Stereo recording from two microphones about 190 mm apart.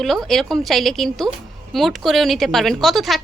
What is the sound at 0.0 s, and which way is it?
A woman's voice, centre (ahead or behind).